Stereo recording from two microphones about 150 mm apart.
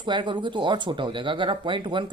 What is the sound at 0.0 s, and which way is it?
Speech, 30° right (ahead or behind).